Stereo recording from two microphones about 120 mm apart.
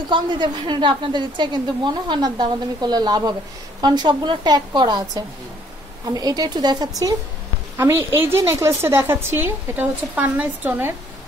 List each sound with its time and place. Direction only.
0.1 s a woman's voice: 40° right (ahead or behind)
7.7 s a woman's voice: 20° right (ahead or behind)